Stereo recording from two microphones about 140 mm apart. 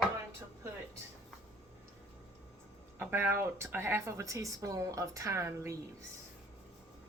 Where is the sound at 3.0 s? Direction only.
15° right (ahead or behind).